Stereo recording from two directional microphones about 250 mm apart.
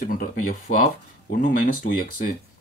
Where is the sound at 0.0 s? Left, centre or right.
Left.